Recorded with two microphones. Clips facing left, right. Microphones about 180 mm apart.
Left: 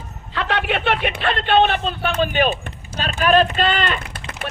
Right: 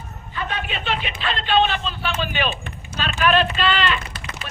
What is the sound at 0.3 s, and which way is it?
Speech, 75° left (ahead or behind).